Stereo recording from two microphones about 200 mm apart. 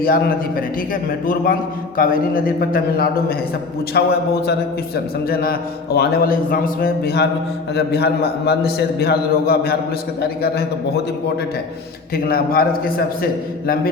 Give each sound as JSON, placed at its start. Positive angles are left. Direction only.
{"t": 0.0, "sound": "a man's voice", "side_deg": 45}
{"t": 2.0, "sound": "a man's voice", "side_deg": 45}
{"t": 12.1, "sound": "a man's voice", "side_deg": 50}